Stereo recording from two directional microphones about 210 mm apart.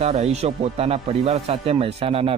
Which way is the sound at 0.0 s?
30° right (ahead or behind).